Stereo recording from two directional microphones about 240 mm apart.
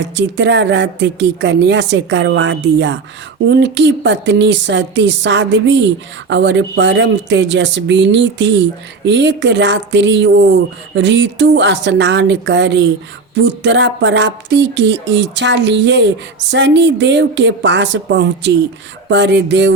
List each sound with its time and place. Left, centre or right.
0.1 s speech: right